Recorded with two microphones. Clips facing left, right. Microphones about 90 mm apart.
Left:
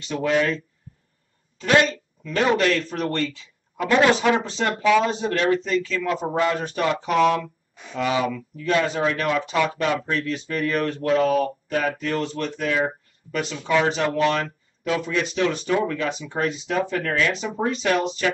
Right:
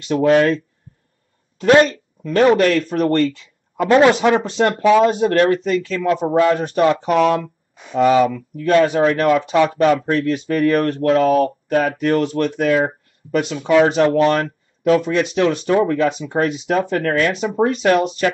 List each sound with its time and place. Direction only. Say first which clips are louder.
0.0 s speech: right 8 dB; 55° right (ahead or behind)
1.6 s speech: right 7 dB; 45° right (ahead or behind)